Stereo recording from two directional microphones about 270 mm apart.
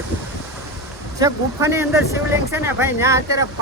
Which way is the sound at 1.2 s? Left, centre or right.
Centre.